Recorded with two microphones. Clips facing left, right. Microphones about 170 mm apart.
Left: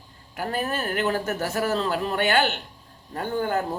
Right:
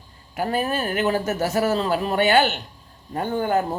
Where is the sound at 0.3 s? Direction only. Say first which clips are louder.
Right 4 dB; 15° right (ahead or behind).